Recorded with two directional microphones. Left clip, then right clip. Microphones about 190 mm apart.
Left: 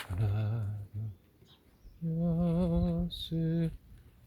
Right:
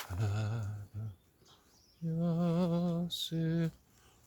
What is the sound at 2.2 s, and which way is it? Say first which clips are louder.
Mantra: left 1 dB; 5° right (ahead or behind).